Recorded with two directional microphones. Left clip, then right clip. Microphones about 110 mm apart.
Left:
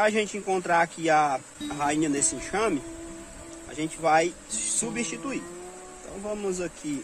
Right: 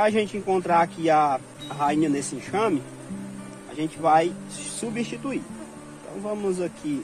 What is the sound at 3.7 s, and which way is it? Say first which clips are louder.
Speech: right 3 dB; 60° left (ahead or behind).